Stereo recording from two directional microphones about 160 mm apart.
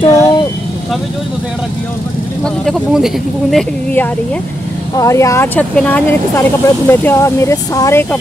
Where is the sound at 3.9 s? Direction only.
10° left (ahead or behind).